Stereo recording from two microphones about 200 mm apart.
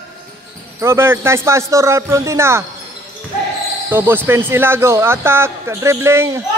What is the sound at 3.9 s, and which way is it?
Speech, 10° right (ahead or behind).